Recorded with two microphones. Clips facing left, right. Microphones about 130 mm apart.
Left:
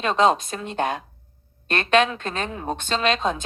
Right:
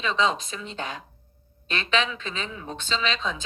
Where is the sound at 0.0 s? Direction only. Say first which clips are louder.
Left 6 dB; 55° left (ahead or behind).